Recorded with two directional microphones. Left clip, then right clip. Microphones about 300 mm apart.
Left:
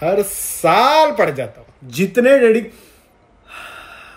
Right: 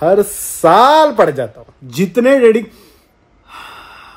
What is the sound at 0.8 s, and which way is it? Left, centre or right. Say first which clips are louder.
Speech: right 2 dB; centre.